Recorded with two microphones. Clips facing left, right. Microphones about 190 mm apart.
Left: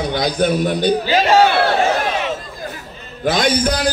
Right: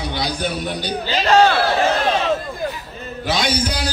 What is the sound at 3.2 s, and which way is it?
Speech, 50° left (ahead or behind).